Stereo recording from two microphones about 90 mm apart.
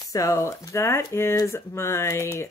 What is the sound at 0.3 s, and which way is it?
Speech, 35° left (ahead or behind).